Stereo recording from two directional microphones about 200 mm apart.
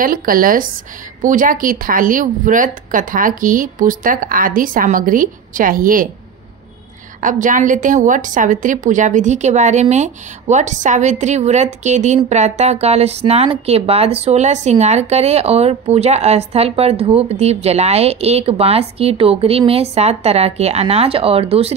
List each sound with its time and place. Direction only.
0.0 s a woman's voice: 45° right (ahead or behind)
7.2 s a woman's voice: 40° right (ahead or behind)